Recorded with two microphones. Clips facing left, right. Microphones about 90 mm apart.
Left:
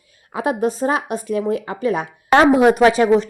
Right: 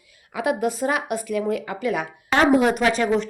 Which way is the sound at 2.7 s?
45° left (ahead or behind).